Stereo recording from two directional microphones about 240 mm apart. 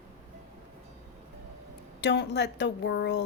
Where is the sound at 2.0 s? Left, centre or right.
Left.